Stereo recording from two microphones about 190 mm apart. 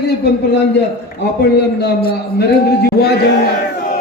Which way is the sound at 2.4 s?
60° left (ahead or behind).